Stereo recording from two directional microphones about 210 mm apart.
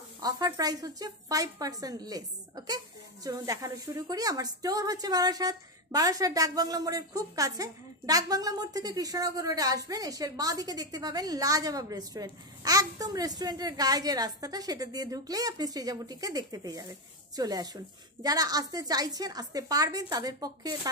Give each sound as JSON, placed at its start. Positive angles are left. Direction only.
{"t": 0.2, "sound": "speech", "side_deg": -15}